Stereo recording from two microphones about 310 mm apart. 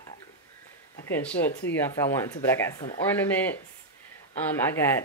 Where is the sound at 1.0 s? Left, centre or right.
Centre.